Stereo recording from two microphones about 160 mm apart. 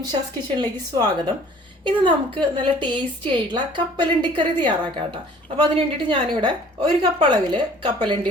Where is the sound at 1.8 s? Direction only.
30° right (ahead or behind).